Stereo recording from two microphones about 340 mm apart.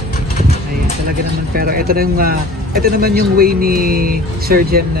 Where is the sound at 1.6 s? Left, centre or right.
Right.